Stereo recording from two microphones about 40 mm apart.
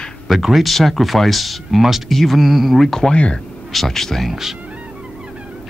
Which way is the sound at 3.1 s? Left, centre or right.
Left.